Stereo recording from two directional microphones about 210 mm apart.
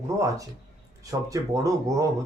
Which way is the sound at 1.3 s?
15° right (ahead or behind).